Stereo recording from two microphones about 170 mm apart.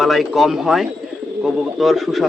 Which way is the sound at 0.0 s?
Centre (ahead or behind).